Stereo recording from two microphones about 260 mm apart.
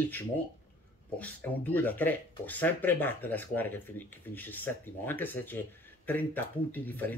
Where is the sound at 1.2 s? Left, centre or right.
Centre.